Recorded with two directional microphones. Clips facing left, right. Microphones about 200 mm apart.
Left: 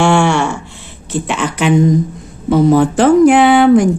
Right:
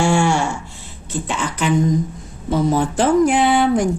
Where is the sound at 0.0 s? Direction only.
70° left (ahead or behind).